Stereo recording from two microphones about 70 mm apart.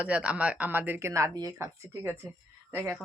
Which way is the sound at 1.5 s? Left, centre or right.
Right.